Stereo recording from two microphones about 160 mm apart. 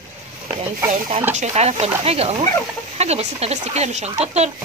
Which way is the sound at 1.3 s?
45° right (ahead or behind).